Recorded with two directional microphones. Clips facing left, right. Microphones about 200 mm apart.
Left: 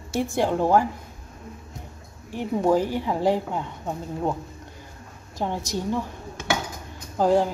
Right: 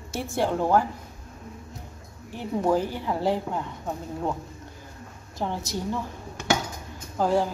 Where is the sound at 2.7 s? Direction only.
15° left (ahead or behind).